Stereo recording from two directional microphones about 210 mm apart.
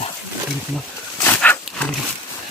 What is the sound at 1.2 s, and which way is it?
Dog, 5° left (ahead or behind).